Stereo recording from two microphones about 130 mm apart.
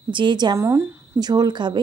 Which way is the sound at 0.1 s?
35° right (ahead or behind).